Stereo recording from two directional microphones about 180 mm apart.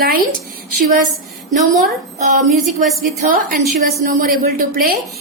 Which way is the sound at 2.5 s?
Centre (ahead or behind).